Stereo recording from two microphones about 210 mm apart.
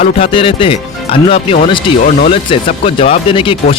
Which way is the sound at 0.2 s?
25° left (ahead or behind).